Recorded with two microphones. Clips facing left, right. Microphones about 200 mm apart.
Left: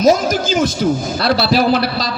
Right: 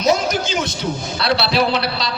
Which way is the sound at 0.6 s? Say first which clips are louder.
Left 8 dB; 90° left.